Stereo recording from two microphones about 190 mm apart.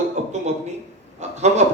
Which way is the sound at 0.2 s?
35° right (ahead or behind).